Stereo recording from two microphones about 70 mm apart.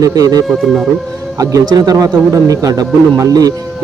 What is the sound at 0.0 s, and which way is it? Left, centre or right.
Speech, right.